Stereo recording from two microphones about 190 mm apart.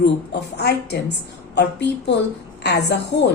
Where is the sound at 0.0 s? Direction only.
60° left (ahead or behind).